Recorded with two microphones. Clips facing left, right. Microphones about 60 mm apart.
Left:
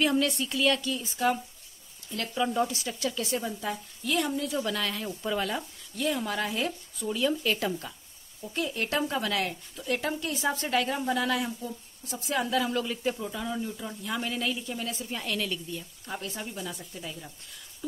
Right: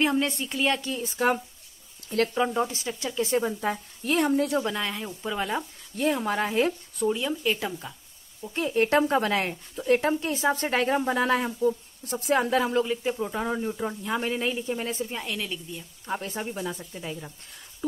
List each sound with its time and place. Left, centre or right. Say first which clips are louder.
0.0 s speech: right 1 dB; right
1.0 s speech: right 4 dB; right
2.3 s speech: right 2 dB; right
4.6 s speech: right 3 dB; right
5.5 s speech: right 4 dB; right
7.1 s speech: right 1 dB; centre
8.5 s speech: right 7 dB; right
12.7 s speech: right 4 dB; centre
13.2 s speech: right 5 dB; right
15.0 s speech: even; centre
16.1 s speech: right 5 dB; right